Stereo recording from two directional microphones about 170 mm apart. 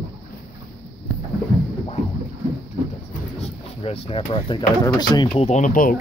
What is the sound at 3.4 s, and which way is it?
Speech, 35° left (ahead or behind).